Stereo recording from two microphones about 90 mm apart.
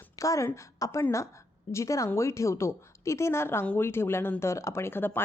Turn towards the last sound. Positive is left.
turn(degrees=25)  # may be behind; listen again after turning